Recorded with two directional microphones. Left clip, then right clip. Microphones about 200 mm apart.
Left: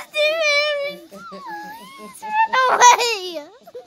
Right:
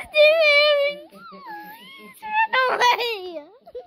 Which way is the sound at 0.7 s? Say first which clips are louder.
Right 4 dB; 15° right (ahead or behind).